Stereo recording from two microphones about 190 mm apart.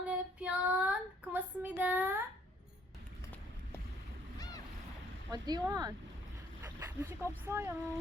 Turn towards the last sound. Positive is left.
turn(degrees=-10)  # may be behind; listen again after turning